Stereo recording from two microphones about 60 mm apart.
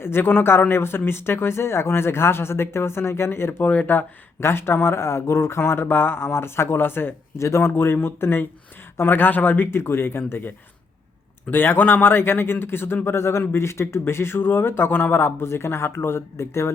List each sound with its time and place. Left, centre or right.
0.0 s a man's voice: left
3.6 s speech: left
4.4 s speech: left
7.3 s speech: left
7.6 s a man's voice: left
9.8 s a man's voice: left
11.5 s a man's voice: left